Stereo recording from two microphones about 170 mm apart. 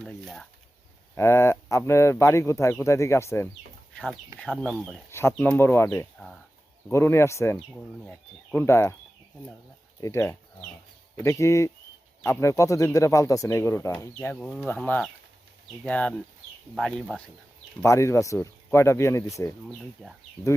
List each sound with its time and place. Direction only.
0.0 s speech: centre (ahead or behind)
1.1 s speech: 15° left (ahead or behind); by 4.9 s centre (ahead or behind)
5.1 s speech: 10° left (ahead or behind)
7.7 s speech: 5° left (ahead or behind)
8.6 s speech: 15° left (ahead or behind)
10.0 s speech: 15° left (ahead or behind)
17.8 s speech: 15° left (ahead or behind)
19.6 s speech: centre (ahead or behind)